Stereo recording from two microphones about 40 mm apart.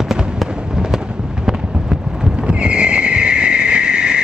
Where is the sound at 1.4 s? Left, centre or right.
Centre.